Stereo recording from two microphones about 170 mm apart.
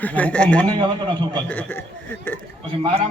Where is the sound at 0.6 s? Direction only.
30° right (ahead or behind).